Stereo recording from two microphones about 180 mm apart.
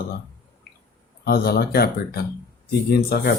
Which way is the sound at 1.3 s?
55° left (ahead or behind).